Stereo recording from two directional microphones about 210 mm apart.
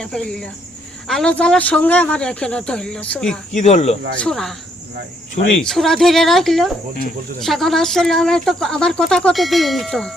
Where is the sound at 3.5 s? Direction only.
35° left (ahead or behind).